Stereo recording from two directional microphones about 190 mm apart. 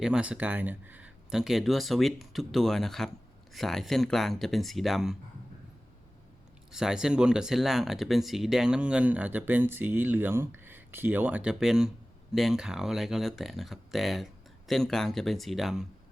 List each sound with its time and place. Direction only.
0.0 s speech: 5° right (ahead or behind)
6.7 s speech: 5° right (ahead or behind)